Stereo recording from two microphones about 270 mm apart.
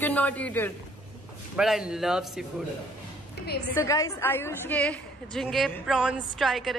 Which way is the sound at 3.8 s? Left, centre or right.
Centre.